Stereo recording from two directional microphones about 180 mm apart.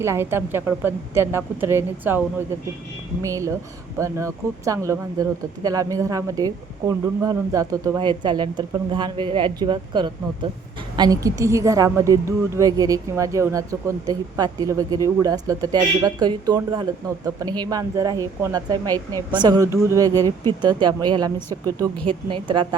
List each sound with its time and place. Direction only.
0.0 s a woman's voice: 15° right (ahead or behind)